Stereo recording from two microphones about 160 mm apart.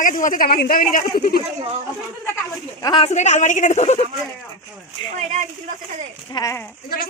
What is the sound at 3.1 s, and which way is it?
Speech, 45° left (ahead or behind).